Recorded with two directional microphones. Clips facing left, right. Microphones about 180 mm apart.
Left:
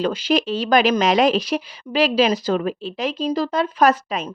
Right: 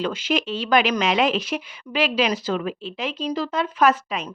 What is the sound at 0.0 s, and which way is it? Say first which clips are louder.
A woman's voice: left 4 dB; 35° left (ahead or behind).